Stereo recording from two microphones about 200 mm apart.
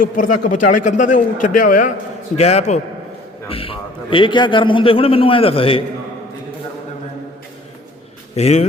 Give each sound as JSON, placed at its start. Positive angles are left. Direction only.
{"t": 0.0, "sound": "a man's voice", "side_deg": 45}
{"t": 8.4, "sound": "a man's voice", "side_deg": 35}